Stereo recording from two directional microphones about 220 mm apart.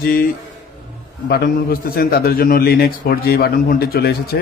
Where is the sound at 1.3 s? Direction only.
45° left (ahead or behind).